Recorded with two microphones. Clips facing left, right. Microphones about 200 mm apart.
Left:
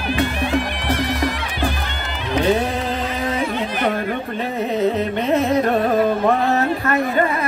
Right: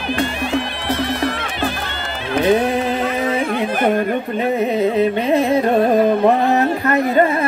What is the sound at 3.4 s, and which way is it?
Carnatic music, 50° right (ahead or behind).